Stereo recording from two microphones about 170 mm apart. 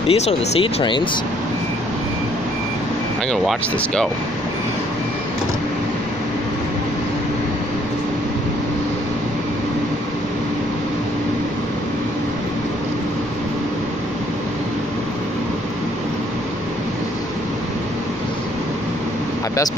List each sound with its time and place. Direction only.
0.1 s speech: 35° left (ahead or behind)
3.3 s speech: 5° left (ahead or behind)